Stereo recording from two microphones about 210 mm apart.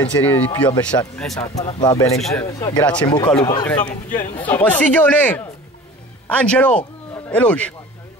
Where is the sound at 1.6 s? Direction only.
30° left (ahead or behind).